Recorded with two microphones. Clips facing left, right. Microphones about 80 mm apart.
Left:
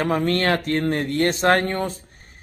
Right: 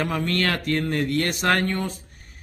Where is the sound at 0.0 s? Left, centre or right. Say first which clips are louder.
Left 4 dB; left.